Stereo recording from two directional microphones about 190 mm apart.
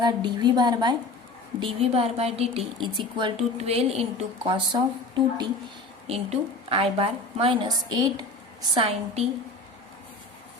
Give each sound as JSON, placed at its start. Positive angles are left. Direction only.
{"t": 0.0, "sound": "a woman's voice", "side_deg": -20}
{"t": 6.1, "sound": "a woman's voice", "side_deg": -30}